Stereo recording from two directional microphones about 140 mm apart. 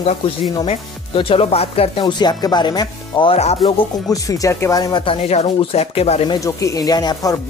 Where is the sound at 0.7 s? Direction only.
40° left (ahead or behind).